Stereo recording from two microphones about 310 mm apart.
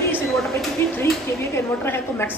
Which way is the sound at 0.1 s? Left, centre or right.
Centre.